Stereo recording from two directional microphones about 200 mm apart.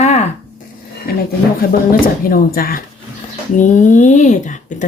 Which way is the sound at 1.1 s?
50° left (ahead or behind).